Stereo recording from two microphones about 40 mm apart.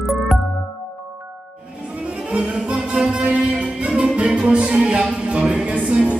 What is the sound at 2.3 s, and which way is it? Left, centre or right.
Music, right.